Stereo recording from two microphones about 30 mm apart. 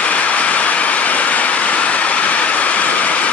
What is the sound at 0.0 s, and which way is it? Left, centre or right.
Vehicle, left.